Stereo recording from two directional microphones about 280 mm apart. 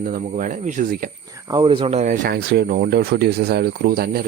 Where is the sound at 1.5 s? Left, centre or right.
Centre.